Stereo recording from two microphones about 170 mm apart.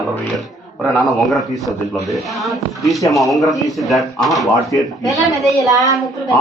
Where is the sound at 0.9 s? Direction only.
Centre (ahead or behind).